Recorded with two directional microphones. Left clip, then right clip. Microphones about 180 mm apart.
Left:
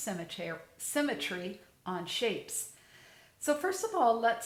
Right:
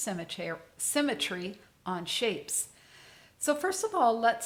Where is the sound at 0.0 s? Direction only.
40° right (ahead or behind).